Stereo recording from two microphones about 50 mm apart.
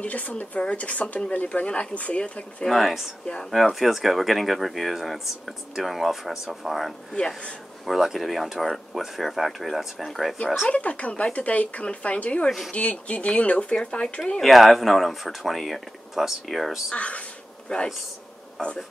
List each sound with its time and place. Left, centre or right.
0.0 s speech: left
2.6 s speech: centre
10.7 s speech: left
14.4 s speech: centre
16.9 s speech: left